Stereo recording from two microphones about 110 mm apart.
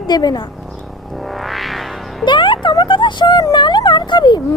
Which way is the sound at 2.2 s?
45° left (ahead or behind).